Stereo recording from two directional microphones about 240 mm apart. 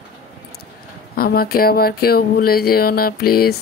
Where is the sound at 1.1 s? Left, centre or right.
Left.